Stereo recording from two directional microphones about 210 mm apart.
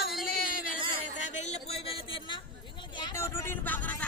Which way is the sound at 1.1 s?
30° left (ahead or behind).